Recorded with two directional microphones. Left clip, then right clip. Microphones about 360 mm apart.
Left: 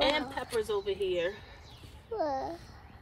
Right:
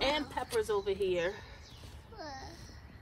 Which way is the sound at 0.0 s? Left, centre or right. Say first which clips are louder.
Left 3 dB; centre.